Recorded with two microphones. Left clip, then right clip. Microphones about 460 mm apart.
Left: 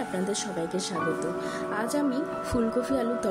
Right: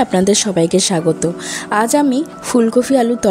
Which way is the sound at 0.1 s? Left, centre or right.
Left.